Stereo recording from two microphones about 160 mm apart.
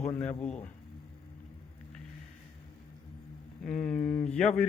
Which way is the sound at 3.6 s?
5° left (ahead or behind).